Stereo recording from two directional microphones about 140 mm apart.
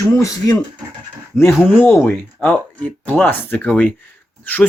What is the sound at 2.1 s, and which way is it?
Speech, 10° left (ahead or behind).